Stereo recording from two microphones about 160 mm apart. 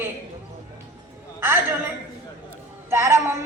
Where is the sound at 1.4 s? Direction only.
15° right (ahead or behind).